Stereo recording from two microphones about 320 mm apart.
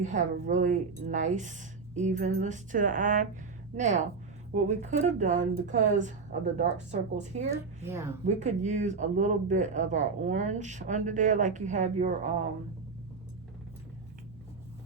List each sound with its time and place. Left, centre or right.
0.0 s speech: right
7.5 s a woman's voice: centre
8.4 s speech: right